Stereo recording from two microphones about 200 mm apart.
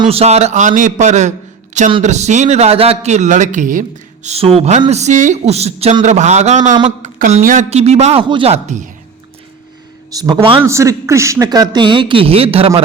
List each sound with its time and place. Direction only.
0.0 s a man's voice: 30° right (ahead or behind)
10.1 s a man's voice: 20° right (ahead or behind)